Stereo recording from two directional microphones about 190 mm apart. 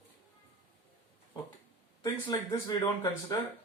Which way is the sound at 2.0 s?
15° left (ahead or behind).